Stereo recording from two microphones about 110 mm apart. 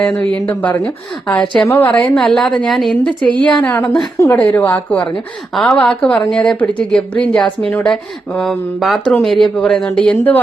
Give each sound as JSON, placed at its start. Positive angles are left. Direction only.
{"t": 0.0, "sound": "a woman's voice", "side_deg": 10}